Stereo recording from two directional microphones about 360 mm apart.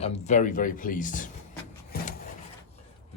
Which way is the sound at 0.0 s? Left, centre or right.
Centre.